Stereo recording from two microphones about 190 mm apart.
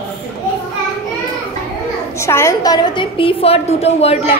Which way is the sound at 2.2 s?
15° left (ahead or behind).